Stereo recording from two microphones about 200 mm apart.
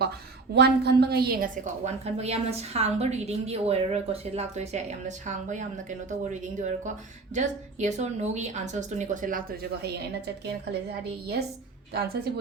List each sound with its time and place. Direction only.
0.5 s a woman's voice: 55° right (ahead or behind); by 5.6 s 40° right (ahead or behind)
7.3 s a woman's voice: 35° right (ahead or behind); by 12.3 s 50° right (ahead or behind)